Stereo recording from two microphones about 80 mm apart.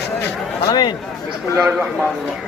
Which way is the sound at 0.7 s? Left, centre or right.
Left.